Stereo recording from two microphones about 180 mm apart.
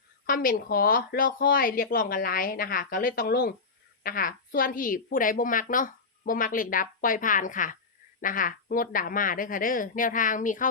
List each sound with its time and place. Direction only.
0.3 s a woman's voice: 50° left (ahead or behind)